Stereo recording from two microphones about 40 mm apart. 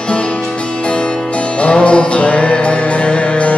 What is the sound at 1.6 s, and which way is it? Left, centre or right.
Music, left.